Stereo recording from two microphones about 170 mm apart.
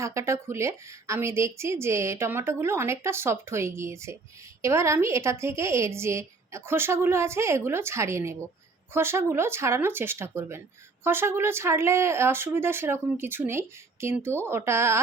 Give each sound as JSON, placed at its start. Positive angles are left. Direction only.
{"t": 0.0, "sound": "a woman's voice", "side_deg": -15}